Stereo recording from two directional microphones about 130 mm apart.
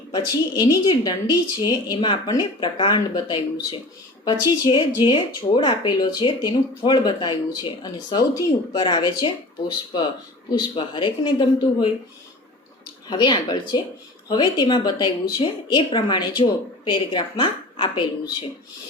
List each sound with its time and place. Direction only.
0.1 s speech: 30° left (ahead or behind)
10.5 s speech: 35° left (ahead or behind)
13.1 s speech: 35° left (ahead or behind)